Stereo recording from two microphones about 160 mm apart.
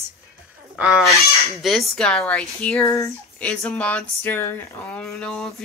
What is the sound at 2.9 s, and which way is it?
Speech, 20° left (ahead or behind).